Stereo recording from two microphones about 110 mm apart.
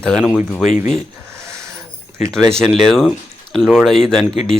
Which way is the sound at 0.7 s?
85° left.